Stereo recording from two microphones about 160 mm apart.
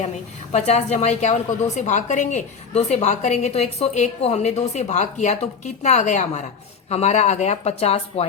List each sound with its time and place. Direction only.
0.5 s a woman's voice: 45° left (ahead or behind)